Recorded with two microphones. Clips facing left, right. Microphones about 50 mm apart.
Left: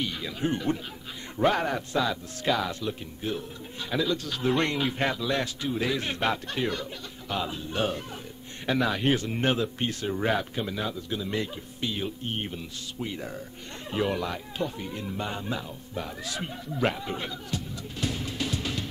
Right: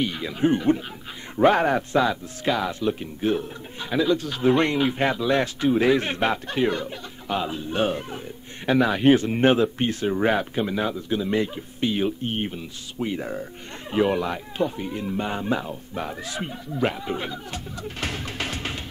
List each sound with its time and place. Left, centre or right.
0.0 s speech: right
2.4 s speech: centre
2.9 s speech: right
3.9 s speech: right
5.6 s speech: right
6.2 s speech: right
12.4 s speech: right
16.4 s speech: centre
17.5 s music: right